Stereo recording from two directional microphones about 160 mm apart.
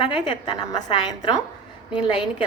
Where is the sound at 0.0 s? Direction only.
30° left (ahead or behind).